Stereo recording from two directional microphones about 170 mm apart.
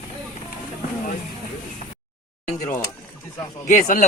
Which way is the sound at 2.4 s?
40° left (ahead or behind).